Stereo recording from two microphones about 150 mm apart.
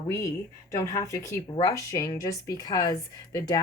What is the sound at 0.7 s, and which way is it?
A woman's voice, 20° left (ahead or behind).